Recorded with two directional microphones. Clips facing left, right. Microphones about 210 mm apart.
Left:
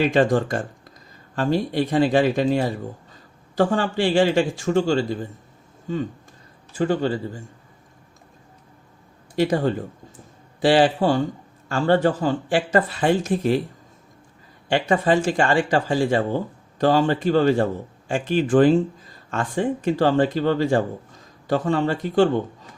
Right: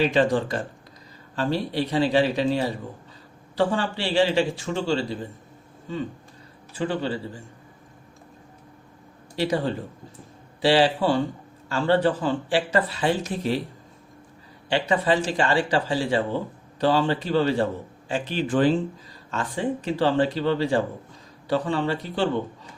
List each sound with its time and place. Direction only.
0.1 s speech: 45° left (ahead or behind)
6.7 s speech: 45° left (ahead or behind)
9.3 s speech: 50° left (ahead or behind)
10.6 s speech: 50° left (ahead or behind)
14.7 s speech: 45° left (ahead or behind)